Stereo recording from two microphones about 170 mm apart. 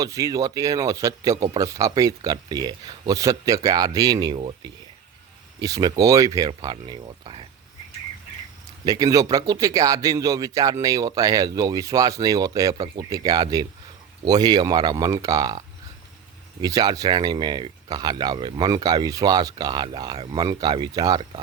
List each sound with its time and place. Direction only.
0.0 s speech: 20° right (ahead or behind)
8.8 s speech: 20° right (ahead or behind)